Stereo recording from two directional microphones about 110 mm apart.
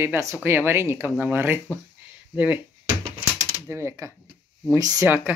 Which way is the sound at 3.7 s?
25° right (ahead or behind).